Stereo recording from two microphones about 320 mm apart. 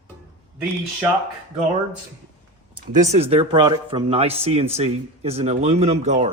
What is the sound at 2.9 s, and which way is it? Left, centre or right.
Speech, right.